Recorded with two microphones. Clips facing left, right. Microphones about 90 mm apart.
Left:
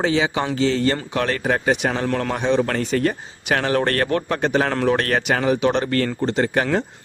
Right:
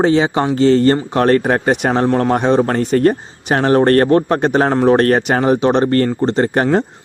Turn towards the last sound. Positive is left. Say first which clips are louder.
# right 6 dB
turn(degrees=-35)  # may be behind; listen again after turning